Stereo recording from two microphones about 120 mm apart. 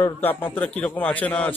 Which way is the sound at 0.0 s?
15° left (ahead or behind).